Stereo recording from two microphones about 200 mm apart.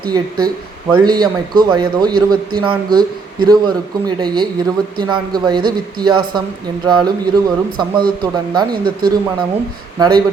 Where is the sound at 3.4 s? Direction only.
20° right (ahead or behind).